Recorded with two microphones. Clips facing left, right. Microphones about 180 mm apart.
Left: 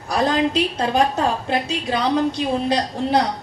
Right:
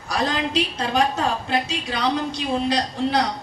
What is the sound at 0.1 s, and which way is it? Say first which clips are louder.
A woman's voice: left 4 dB; 50° left (ahead or behind).